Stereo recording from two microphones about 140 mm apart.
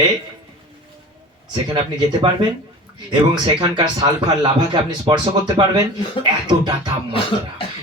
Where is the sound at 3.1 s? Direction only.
35° right (ahead or behind).